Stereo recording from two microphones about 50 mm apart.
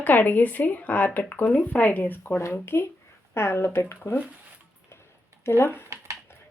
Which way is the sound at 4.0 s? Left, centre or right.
Left.